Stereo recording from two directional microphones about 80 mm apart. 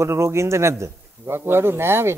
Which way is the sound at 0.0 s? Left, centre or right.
Right.